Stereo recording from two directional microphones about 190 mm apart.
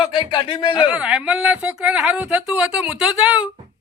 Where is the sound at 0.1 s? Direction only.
25° left (ahead or behind).